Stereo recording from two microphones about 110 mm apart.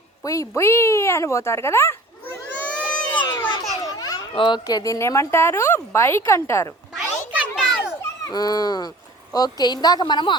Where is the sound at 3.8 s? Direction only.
35° left (ahead or behind).